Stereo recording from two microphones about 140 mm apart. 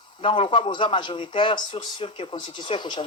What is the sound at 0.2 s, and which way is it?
Speech, 40° left (ahead or behind).